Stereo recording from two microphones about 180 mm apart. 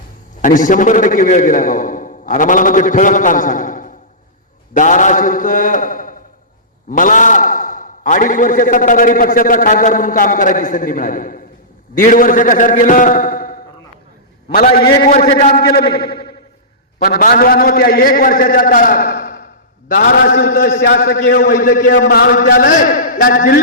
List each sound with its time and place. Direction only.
0.4 s a man's voice: 45° left (ahead or behind)
15.9 s a sound: 60° left (ahead or behind)
17.0 s a man's voice: 55° left (ahead or behind)